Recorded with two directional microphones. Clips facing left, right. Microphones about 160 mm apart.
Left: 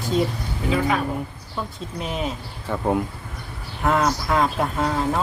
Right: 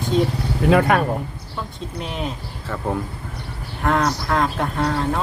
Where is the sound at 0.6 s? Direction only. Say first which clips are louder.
Right 6 dB; 65° right (ahead or behind).